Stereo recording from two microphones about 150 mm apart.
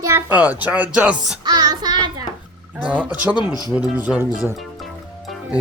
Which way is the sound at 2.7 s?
10° right (ahead or behind).